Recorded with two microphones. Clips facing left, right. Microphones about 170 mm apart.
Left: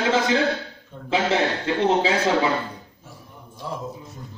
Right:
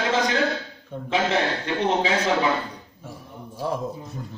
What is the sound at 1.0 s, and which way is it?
A man's voice, 30° left (ahead or behind).